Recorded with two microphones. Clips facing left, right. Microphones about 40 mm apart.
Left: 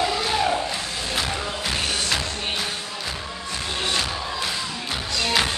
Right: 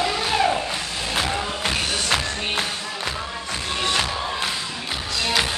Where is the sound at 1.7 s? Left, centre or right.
Right.